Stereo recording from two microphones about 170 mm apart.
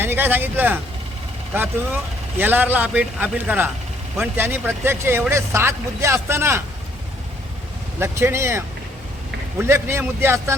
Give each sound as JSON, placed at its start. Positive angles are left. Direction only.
{"t": 0.0, "sound": "a man's voice", "side_deg": -10}
{"t": 2.4, "sound": "a man's voice", "side_deg": -10}
{"t": 7.9, "sound": "a man's voice", "side_deg": -15}